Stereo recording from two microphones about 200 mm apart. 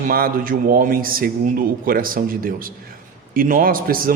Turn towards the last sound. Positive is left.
turn(degrees=-45)  # may be behind; listen again after turning